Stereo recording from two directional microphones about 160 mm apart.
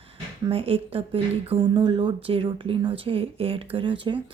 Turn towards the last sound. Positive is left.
turn(degrees=-35)  # may be behind; listen again after turning